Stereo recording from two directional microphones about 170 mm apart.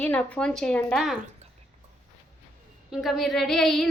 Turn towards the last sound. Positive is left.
turn(degrees=0)  # may be behind; listen again after turning